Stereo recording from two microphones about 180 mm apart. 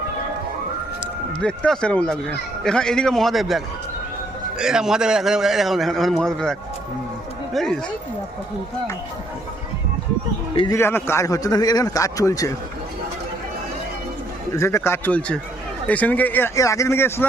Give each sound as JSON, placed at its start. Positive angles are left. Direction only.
{"t": 1.4, "sound": "a man's voice", "side_deg": 5}
{"t": 10.5, "sound": "a man's voice", "side_deg": 30}
{"t": 10.8, "sound": "a man's voice", "side_deg": 15}
{"t": 14.5, "sound": "speech", "side_deg": 15}